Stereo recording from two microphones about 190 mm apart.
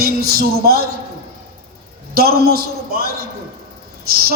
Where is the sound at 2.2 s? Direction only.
55° right (ahead or behind).